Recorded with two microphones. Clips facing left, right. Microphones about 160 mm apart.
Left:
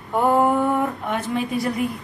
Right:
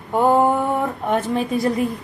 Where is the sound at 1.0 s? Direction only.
40° right (ahead or behind).